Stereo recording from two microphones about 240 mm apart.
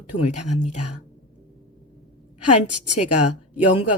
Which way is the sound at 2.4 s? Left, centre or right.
Left.